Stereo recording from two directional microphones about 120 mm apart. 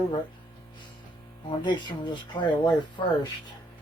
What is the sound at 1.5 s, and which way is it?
Speech, 40° left (ahead or behind).